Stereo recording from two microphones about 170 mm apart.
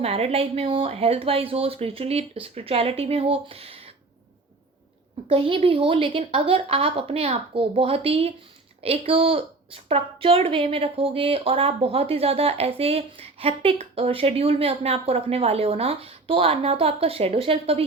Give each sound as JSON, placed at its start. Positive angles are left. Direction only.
{"t": 0.0, "sound": "a woman's voice", "side_deg": -35}
{"t": 5.3, "sound": "a woman's voice", "side_deg": -35}